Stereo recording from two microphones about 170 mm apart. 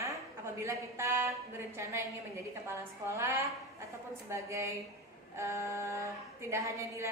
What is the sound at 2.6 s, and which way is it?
A woman's voice, 15° right (ahead or behind).